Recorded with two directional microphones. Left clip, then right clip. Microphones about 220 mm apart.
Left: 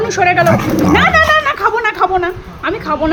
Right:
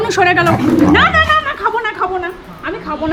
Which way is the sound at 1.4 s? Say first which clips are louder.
Left 3 dB; 20° left (ahead or behind).